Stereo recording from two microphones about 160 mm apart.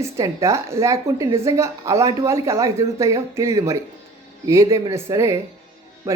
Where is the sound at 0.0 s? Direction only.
20° right (ahead or behind).